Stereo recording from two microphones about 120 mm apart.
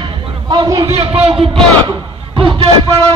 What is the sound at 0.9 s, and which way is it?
Speech, 55° right (ahead or behind).